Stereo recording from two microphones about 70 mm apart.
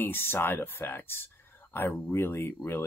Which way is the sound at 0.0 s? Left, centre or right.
Left.